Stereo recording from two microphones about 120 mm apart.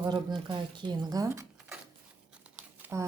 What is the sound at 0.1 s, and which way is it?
A woman's voice, 40° right (ahead or behind).